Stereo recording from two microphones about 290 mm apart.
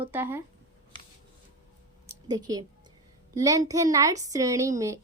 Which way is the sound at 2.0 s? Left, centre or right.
Centre.